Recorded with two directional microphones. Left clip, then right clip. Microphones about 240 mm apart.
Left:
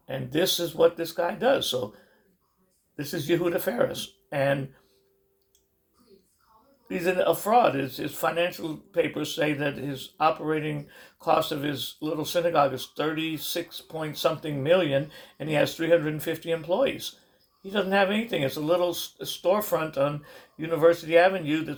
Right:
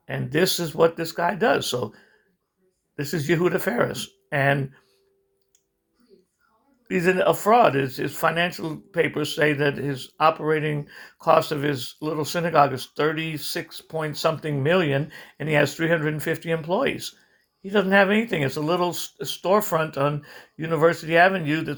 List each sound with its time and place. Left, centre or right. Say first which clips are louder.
0.0 s speech: right 3 dB; right
2.9 s speech: right 3 dB; right
6.9 s speech: right 4 dB; right